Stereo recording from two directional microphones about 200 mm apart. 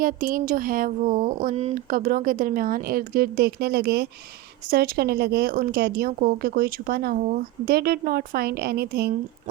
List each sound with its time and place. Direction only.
0.0 s speech: 40° right (ahead or behind)